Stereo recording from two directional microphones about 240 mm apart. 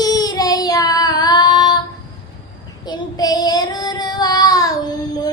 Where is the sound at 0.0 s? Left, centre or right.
Centre.